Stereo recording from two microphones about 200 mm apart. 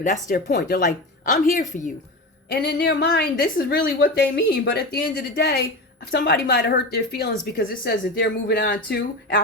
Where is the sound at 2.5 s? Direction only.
55° left (ahead or behind).